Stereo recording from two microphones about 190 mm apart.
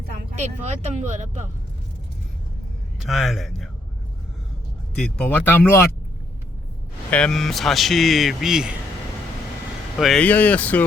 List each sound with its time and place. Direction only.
0.3 s speech: 35° right (ahead or behind)
3.0 s speech: centre (ahead or behind)
4.9 s speech: 5° left (ahead or behind)
7.1 s speech: 5° left (ahead or behind)
10.0 s speech: 5° left (ahead or behind)